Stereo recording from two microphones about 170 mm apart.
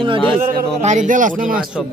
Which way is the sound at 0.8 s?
45° right (ahead or behind).